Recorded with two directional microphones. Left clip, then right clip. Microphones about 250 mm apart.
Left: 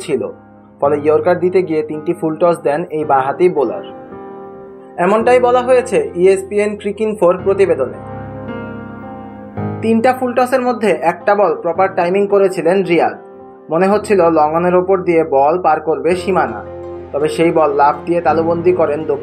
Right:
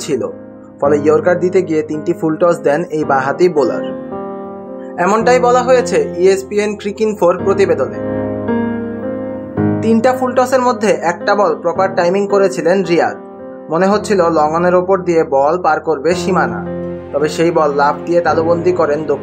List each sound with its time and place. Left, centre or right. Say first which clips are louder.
0.7 s speech: right 1 dB; right
4.9 s speech: even; centre
9.8 s speech: left 1 dB; centre